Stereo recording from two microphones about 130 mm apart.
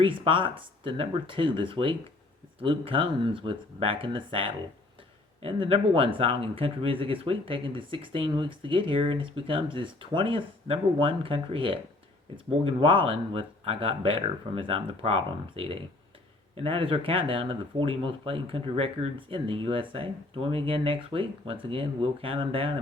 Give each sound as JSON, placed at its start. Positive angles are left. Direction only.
{"t": 0.0, "sound": "speech", "side_deg": -40}